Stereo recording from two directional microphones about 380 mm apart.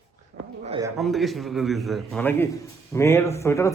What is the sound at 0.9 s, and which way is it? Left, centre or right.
A man's voice, centre.